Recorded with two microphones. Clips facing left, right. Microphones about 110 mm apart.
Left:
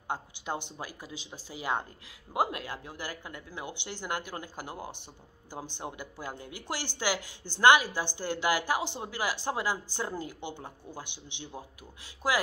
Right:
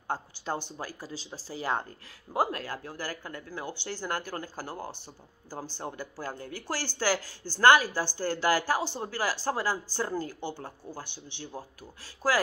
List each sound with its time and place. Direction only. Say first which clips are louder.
0.1 s speech: right 2 dB; 20° left (ahead or behind)
1.0 s speech: right 3 dB; 35° right (ahead or behind)
1.5 s speech: right 1 dB; 15° left (ahead or behind)